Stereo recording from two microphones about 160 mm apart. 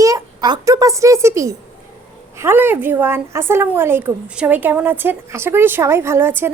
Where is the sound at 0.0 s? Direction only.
25° right (ahead or behind).